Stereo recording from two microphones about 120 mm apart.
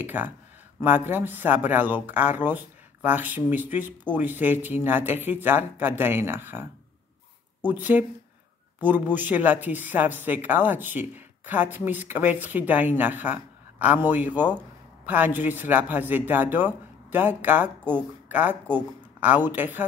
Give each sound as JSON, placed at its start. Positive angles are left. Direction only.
{"t": 0.0, "sound": "speech", "side_deg": -15}